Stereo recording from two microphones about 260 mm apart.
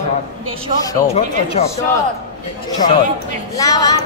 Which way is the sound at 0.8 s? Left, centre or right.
Left.